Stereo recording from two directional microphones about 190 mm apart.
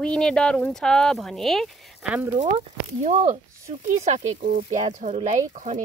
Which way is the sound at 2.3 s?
35° right (ahead or behind).